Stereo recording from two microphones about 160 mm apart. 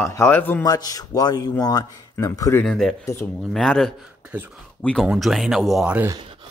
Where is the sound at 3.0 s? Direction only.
15° left (ahead or behind).